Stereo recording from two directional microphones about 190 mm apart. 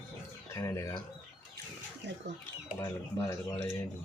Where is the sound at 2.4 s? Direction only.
15° left (ahead or behind).